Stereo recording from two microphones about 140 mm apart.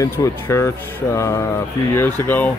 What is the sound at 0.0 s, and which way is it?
Speech, 20° left (ahead or behind).